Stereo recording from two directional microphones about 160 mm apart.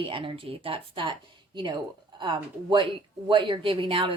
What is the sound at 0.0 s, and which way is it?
A woman's voice, 35° right (ahead or behind).